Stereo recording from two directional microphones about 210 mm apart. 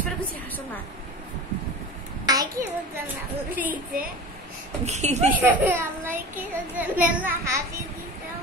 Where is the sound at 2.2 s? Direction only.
20° right (ahead or behind).